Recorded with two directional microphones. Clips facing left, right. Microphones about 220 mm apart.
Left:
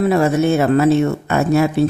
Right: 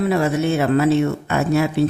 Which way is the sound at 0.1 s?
45° left (ahead or behind).